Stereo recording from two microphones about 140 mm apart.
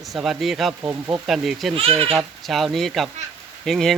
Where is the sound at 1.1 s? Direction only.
Centre (ahead or behind).